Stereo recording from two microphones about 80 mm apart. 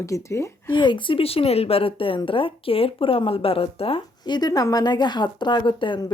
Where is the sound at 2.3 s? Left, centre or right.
Left.